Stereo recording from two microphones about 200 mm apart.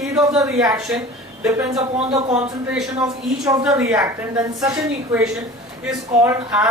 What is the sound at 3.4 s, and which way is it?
A woman's voice, 15° right (ahead or behind).